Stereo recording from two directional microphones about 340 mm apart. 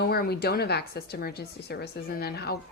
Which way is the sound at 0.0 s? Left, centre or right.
Left.